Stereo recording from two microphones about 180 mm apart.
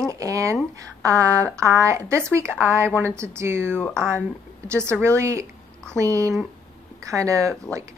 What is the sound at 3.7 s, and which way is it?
Speech, 5° left (ahead or behind).